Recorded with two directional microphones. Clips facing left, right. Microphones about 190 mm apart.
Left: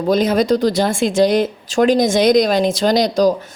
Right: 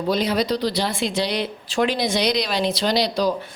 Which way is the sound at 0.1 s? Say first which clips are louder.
Left 7 dB; 45° left (ahead or behind).